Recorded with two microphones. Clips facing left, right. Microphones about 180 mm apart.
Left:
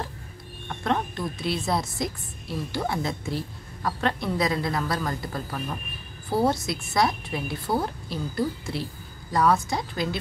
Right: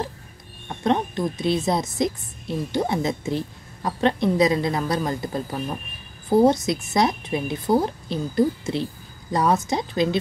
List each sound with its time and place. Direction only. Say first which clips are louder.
0.7 s a woman's voice: right 5 dB; 20° right (ahead or behind)